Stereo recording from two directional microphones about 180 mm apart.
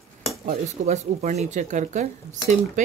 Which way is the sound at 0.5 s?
40° right (ahead or behind).